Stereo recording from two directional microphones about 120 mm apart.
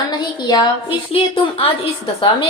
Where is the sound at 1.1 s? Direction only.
50° left (ahead or behind).